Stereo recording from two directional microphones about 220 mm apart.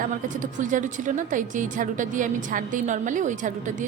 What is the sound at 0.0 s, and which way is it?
A woman's voice, 35° right (ahead or behind).